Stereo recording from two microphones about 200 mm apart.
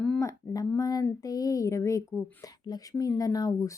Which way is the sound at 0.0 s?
10° left (ahead or behind).